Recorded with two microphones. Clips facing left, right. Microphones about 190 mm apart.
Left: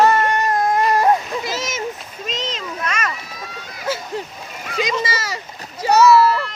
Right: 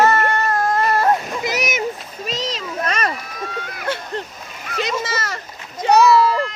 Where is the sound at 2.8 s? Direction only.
35° right (ahead or behind).